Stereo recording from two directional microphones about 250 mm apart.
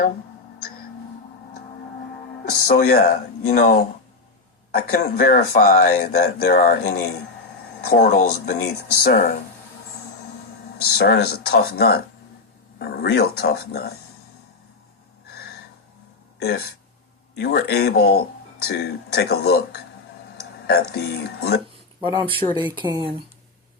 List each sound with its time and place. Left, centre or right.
2.6 s speech: left
10.8 s speech: left
17.3 s speech: left
20.9 s speech: left
22.0 s speech: centre